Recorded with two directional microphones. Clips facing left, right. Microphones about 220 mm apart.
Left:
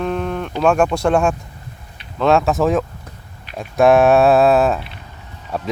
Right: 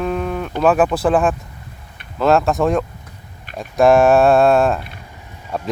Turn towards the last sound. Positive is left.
turn(degrees=0)  # may be behind; listen again after turning